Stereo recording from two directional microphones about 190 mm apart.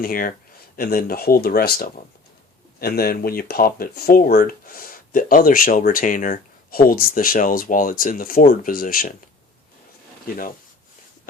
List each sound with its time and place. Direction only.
0.0 s speech: 50° left (ahead or behind)